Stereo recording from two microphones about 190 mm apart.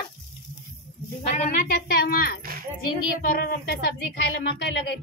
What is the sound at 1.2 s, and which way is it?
Speech, 40° left (ahead or behind).